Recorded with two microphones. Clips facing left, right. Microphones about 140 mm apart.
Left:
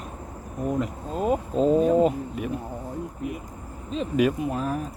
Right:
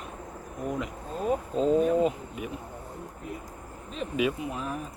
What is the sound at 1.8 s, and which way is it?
Speech, 45° left (ahead or behind).